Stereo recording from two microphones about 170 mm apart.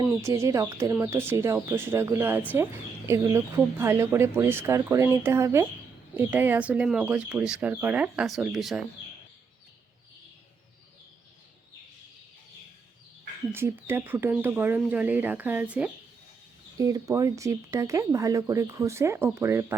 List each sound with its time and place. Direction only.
0.0 s speech: 15° right (ahead or behind)
13.5 s speech: 15° right (ahead or behind)
16.7 s speech: 20° right (ahead or behind)